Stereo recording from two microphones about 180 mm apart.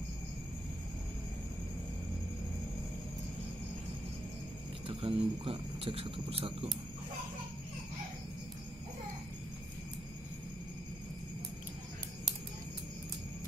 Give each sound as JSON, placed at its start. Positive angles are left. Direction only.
{"t": 4.8, "sound": "speech", "side_deg": -30}